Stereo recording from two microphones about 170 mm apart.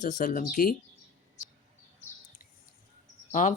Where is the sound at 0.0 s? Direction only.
45° left (ahead or behind).